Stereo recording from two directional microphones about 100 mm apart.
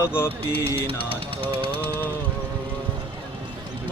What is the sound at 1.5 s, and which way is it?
Speech, 60° right (ahead or behind).